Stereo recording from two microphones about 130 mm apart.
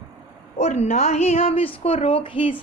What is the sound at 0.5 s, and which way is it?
Speech, 60° left (ahead or behind).